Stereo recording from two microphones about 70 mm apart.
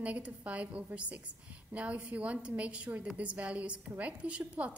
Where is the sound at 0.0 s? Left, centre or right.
Centre.